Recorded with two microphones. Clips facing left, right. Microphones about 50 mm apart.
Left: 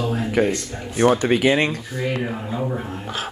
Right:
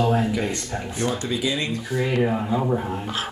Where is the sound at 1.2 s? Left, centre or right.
Left.